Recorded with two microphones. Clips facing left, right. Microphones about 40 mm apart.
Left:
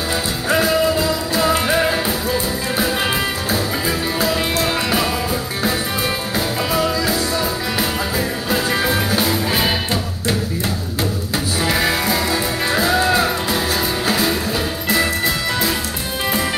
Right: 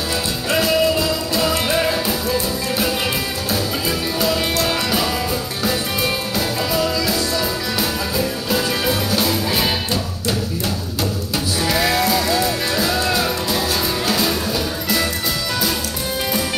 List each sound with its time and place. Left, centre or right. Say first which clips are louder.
0.5 s music: left 1 dB; left
6.3 s music: left 1 dB; left
8.8 s music: left 1 dB; left
11.6 s music: right 1 dB; left